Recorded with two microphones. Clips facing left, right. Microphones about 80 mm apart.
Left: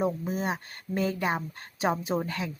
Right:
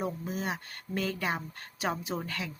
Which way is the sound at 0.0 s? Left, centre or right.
Left.